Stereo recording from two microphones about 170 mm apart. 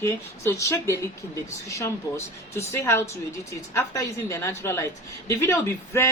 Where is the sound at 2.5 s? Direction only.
15° left (ahead or behind).